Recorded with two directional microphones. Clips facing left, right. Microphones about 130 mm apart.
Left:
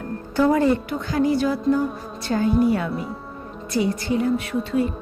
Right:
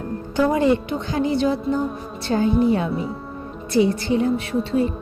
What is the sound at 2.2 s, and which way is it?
Speech, 25° right (ahead or behind).